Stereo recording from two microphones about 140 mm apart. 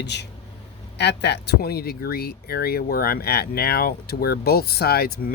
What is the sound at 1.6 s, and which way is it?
Speech, 90° left.